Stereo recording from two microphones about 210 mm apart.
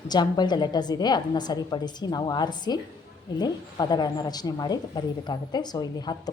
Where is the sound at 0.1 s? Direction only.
20° left (ahead or behind).